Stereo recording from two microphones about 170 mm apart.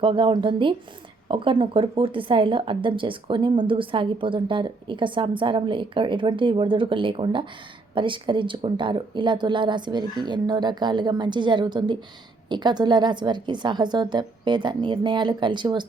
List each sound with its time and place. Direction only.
0.0 s a woman's voice: 30° right (ahead or behind)